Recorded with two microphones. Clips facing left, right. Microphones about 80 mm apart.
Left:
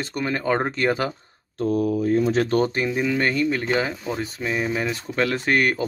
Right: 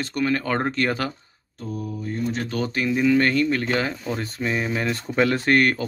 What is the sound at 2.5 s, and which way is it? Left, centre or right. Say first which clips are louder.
Speech: left 4 dB; left.